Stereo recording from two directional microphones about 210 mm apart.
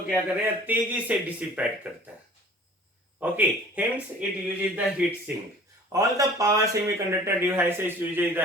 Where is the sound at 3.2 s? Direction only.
5° right (ahead or behind).